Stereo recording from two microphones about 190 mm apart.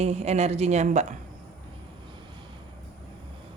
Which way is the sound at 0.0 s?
35° right (ahead or behind).